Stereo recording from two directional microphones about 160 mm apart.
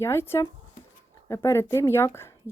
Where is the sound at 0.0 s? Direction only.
15° left (ahead or behind).